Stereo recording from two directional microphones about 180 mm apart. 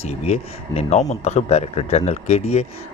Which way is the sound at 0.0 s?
35° left (ahead or behind).